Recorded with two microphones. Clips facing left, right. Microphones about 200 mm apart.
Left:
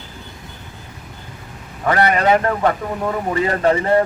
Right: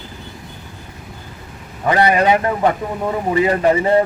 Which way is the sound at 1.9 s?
20° right (ahead or behind).